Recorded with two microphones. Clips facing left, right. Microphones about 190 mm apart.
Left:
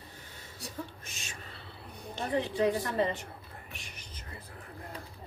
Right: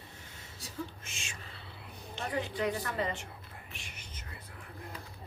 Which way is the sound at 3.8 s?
35° left (ahead or behind).